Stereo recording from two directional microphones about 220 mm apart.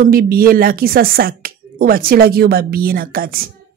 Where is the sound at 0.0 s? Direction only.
45° right (ahead or behind).